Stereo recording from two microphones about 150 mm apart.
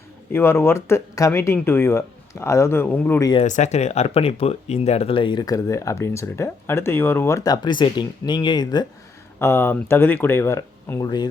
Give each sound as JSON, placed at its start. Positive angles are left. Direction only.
{"t": 0.3, "sound": "speech", "side_deg": 15}
{"t": 3.4, "sound": "speech", "side_deg": 55}
{"t": 9.4, "sound": "speech", "side_deg": 15}